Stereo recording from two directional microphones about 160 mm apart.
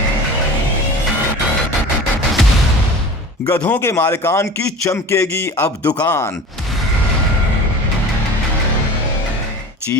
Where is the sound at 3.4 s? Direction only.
20° left (ahead or behind).